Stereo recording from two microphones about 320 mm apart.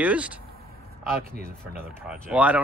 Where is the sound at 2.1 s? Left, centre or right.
Centre.